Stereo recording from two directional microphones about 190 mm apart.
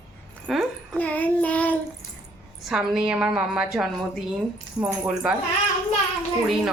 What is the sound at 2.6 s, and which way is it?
Speech, 5° right (ahead or behind).